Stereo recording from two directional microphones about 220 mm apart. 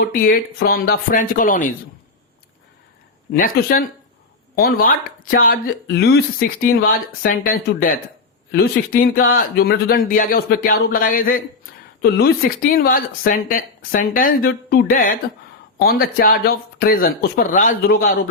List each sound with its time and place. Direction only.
0.0 s speech: 40° left (ahead or behind)
3.3 s speech: 40° left (ahead or behind)